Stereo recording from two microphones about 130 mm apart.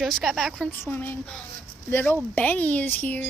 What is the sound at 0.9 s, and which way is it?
Speech, 15° left (ahead or behind).